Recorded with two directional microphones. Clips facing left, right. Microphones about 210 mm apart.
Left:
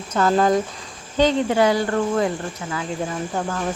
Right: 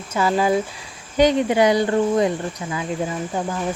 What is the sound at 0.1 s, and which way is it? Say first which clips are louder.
Speech: left 1 dB; 5° right (ahead or behind).